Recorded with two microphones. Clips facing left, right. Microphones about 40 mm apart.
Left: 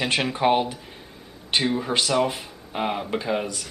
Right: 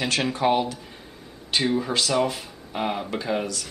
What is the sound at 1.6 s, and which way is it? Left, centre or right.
Speech, centre.